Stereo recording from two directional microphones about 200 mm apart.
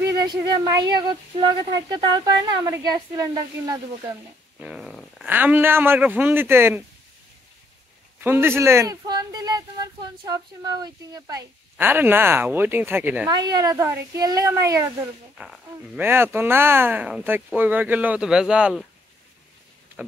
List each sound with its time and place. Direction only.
0.0 s speech: 15° right (ahead or behind)
4.6 s speech: 5° right (ahead or behind)
8.2 s speech: 10° right (ahead or behind)
15.3 s speech: centre (ahead or behind)
20.0 s a sound: 10° right (ahead or behind)